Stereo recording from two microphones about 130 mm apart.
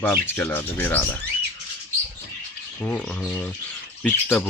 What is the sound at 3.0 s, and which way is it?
Speech, centre (ahead or behind).